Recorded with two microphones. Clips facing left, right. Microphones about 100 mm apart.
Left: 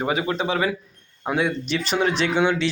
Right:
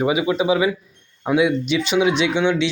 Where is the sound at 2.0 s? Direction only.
Centre (ahead or behind).